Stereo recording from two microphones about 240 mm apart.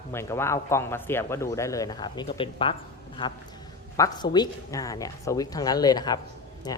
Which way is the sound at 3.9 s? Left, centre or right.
Centre.